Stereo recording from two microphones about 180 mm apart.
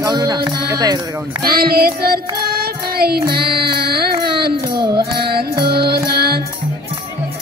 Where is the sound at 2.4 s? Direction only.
60° right (ahead or behind).